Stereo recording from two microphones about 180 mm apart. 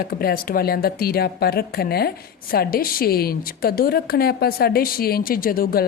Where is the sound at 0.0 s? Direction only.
55° left (ahead or behind).